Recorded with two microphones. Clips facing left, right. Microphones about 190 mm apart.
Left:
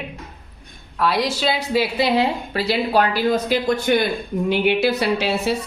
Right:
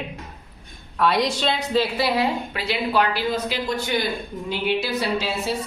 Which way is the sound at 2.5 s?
40° left (ahead or behind).